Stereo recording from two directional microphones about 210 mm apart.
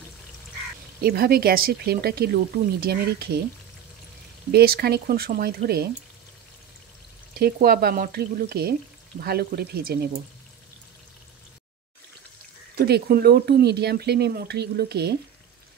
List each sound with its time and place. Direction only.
1.0 s speech: 45° right (ahead or behind)
4.5 s speech: 50° right (ahead or behind)
7.3 s speech: 45° right (ahead or behind)
12.7 s speech: 50° right (ahead or behind)